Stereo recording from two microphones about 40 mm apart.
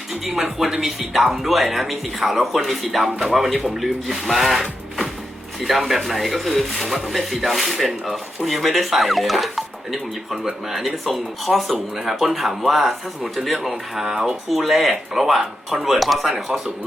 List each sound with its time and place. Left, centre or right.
0.1 s speech: centre
14.0 s speech: centre